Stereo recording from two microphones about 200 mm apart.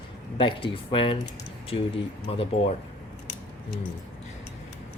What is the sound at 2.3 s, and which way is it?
Speech, 30° left (ahead or behind).